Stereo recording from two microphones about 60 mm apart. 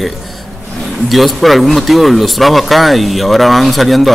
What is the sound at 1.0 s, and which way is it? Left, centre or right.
Speech, centre.